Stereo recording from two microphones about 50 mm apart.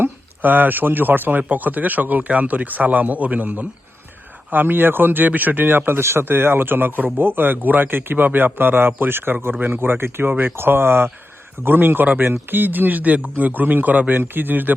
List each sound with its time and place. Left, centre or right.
0.0 s a man's voice: right
4.5 s a man's voice: right